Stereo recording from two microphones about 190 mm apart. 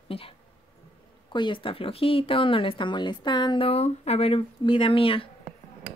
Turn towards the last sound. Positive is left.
turn(degrees=30)  # may be behind; listen again after turning